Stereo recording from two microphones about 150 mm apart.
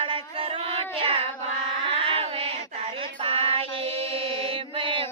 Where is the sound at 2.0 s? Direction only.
40° right (ahead or behind).